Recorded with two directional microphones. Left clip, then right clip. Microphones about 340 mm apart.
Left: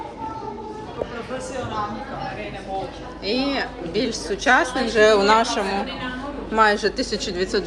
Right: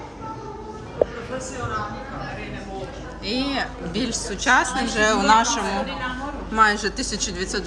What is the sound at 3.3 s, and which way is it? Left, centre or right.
Speech, right.